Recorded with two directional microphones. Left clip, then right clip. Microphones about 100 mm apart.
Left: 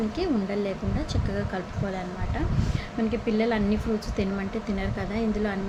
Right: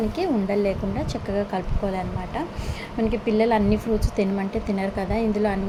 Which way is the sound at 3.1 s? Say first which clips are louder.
Right 6 dB; 45° right (ahead or behind).